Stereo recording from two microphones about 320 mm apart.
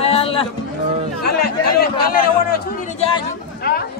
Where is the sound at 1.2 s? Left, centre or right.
Left.